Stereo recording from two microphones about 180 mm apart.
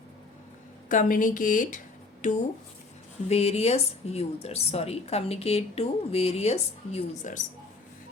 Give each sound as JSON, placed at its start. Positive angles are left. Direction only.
{"t": 0.9, "sound": "speech", "side_deg": 50}